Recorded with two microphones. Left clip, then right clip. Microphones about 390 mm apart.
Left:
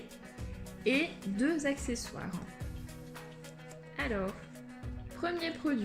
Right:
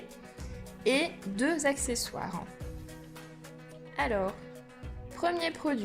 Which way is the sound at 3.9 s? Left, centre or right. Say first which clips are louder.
Right 6 dB; centre.